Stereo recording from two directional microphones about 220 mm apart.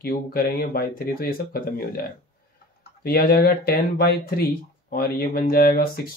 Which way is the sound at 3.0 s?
45° left (ahead or behind).